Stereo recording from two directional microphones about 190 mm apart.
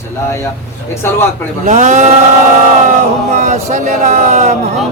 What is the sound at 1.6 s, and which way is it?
Speech, 40° right (ahead or behind).